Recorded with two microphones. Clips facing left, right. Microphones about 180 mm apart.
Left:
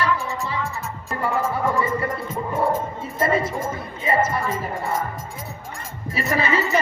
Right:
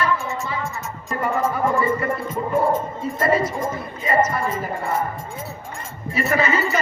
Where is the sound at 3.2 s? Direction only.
25° left (ahead or behind).